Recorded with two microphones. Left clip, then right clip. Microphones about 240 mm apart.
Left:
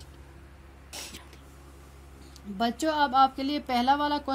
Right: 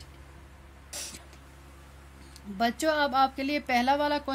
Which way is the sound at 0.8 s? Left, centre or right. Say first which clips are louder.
Right 1 dB; right.